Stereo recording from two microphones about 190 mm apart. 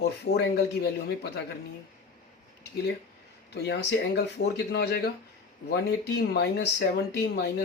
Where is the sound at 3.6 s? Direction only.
60° left (ahead or behind).